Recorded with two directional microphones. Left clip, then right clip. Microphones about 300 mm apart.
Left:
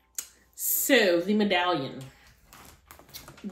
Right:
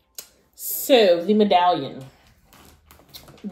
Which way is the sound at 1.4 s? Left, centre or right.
Centre.